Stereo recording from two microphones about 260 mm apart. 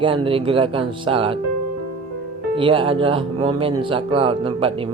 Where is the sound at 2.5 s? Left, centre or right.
Right.